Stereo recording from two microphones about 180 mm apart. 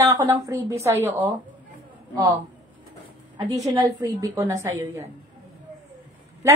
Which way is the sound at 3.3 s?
20° right (ahead or behind).